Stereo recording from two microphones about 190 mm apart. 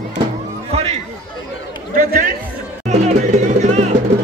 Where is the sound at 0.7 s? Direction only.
30° right (ahead or behind).